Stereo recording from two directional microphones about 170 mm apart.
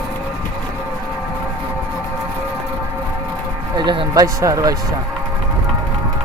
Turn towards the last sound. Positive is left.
turn(degrees=-20)  # may be behind; listen again after turning